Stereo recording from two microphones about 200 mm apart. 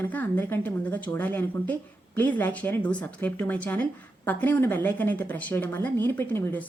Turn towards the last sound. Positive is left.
turn(degrees=10)  # may be behind; listen again after turning